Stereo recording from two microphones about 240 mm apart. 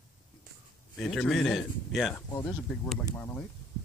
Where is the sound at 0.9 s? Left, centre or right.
Centre.